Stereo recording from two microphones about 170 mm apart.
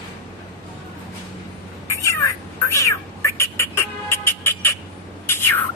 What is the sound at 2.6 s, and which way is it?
Music, 15° left (ahead or behind).